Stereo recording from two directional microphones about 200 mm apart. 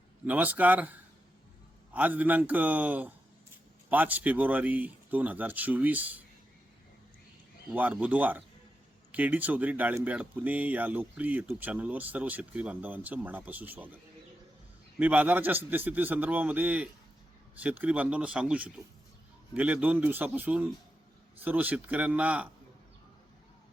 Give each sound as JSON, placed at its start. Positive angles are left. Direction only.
{"t": 0.3, "sound": "speech", "side_deg": -10}
{"t": 7.7, "sound": "speech", "side_deg": -5}